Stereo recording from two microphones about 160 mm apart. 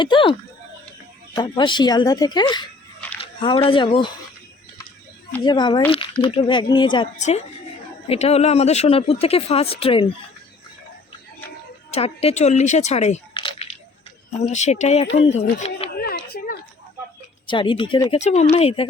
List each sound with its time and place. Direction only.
0.0 s speech: 30° left (ahead or behind)
3.2 s a sound: 35° left (ahead or behind)
3.7 s speech: 30° left (ahead or behind)
5.4 s speech: 30° left (ahead or behind)
7.2 s speech: 45° left (ahead or behind)
11.9 s speech: 40° left (ahead or behind)
14.4 s speech: 45° left (ahead or behind)
16.0 s a sound: 75° left (ahead or behind)
17.4 s speech: 30° left (ahead or behind)
18.1 s speech: 45° left (ahead or behind)